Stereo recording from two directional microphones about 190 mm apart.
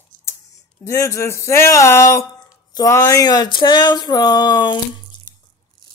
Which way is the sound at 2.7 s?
20° left (ahead or behind).